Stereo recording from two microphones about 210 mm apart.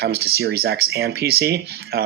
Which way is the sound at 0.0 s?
50° right (ahead or behind).